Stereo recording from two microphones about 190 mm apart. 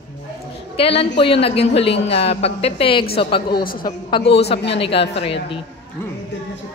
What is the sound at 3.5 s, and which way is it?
Speech, 55° left (ahead or behind).